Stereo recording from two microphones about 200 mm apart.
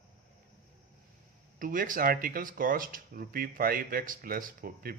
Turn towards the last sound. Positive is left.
turn(degrees=-45)  # may be behind; listen again after turning